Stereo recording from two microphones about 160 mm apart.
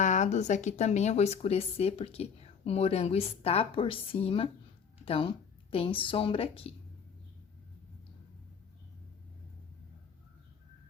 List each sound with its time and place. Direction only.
0.0 s a woman's voice: 50° left (ahead or behind)